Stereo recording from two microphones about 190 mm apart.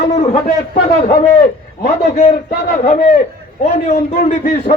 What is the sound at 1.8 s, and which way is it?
A man's voice, 35° left (ahead or behind).